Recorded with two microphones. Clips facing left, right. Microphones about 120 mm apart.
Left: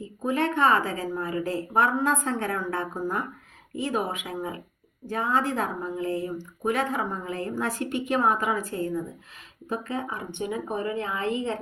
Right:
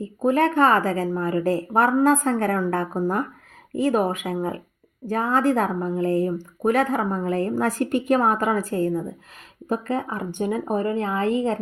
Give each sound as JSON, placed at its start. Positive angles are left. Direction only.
{"t": 0.0, "sound": "a woman's voice", "side_deg": -45}